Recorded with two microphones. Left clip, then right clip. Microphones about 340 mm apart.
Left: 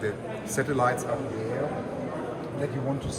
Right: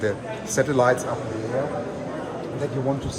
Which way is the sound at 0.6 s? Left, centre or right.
Centre.